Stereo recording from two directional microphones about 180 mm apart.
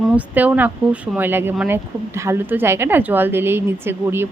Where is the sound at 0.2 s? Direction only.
10° right (ahead or behind).